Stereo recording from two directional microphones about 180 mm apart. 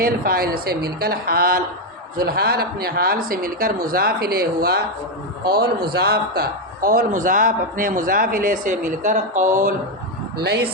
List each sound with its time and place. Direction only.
0.0 s a man's voice: 55° right (ahead or behind)
10.3 s speech: 65° right (ahead or behind)